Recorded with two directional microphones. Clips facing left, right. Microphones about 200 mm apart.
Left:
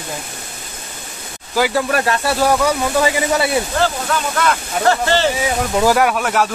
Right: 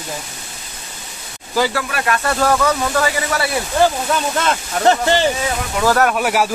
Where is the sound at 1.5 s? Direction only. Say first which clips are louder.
Left 3 dB; 10° left (ahead or behind).